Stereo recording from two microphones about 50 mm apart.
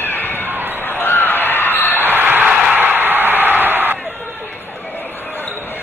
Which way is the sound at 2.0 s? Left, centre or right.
Right.